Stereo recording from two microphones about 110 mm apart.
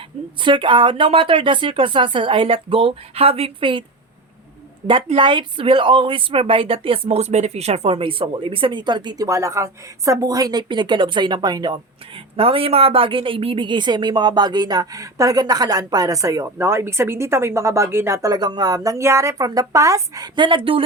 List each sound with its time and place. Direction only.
0.4 s speech: 45° right (ahead or behind)
5.1 s speech: 50° right (ahead or behind)
9.2 s a woman's voice: 30° right (ahead or behind); by 20.8 s 50° right (ahead or behind)